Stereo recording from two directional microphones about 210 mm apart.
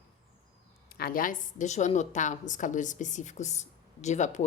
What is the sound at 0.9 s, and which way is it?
A woman's voice, 45° left (ahead or behind).